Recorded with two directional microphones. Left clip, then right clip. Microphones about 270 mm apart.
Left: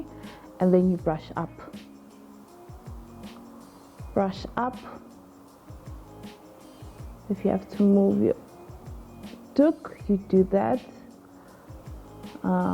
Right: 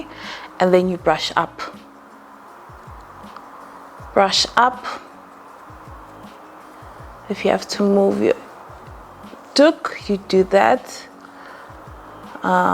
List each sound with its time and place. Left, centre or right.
0.2 s a sound: centre
1.0 s speech: centre
4.1 s speech: centre
7.3 s speech: centre
7.8 s speech: right
9.5 s speech: centre
12.4 s music: centre